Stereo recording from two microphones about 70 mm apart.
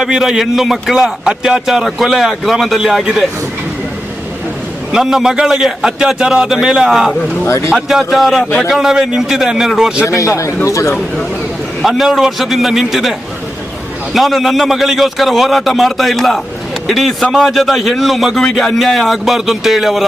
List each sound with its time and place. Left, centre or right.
0.0 s a man's voice: centre
4.9 s a man's voice: centre
7.4 s a man's voice: left
7.7 s a man's voice: centre
10.1 s a man's voice: left
11.8 s a man's voice: centre